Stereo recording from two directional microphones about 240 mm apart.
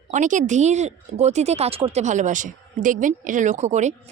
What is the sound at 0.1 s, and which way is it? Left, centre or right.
Speech, right.